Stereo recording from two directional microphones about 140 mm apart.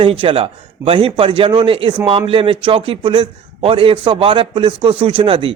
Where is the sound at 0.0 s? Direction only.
40° right (ahead or behind).